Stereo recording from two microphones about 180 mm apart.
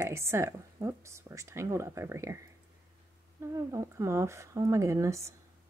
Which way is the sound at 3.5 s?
20° right (ahead or behind).